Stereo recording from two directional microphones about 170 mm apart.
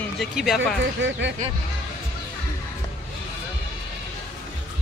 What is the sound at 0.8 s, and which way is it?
Speech, 90° right.